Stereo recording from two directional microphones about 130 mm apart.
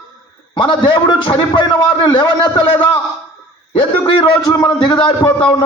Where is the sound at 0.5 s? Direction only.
40° left (ahead or behind).